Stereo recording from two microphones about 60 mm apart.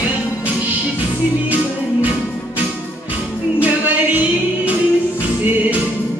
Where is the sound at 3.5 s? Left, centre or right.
Right.